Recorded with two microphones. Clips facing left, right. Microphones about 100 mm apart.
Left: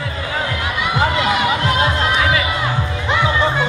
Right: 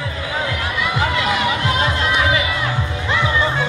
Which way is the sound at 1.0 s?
15° left (ahead or behind).